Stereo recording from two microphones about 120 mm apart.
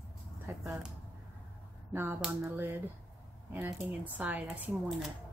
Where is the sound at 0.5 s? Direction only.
20° right (ahead or behind).